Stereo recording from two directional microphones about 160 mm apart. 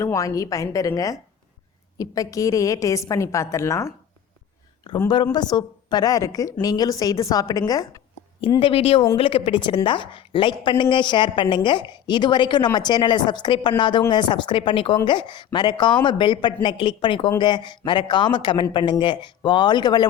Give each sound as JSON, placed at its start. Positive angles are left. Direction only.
{"t": 0.0, "sound": "a woman's voice", "side_deg": 20}
{"t": 4.9, "sound": "a woman's voice", "side_deg": 25}
{"t": 8.4, "sound": "a woman's voice", "side_deg": 35}